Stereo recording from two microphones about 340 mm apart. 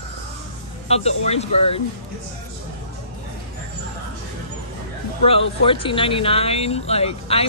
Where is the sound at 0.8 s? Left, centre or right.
Centre.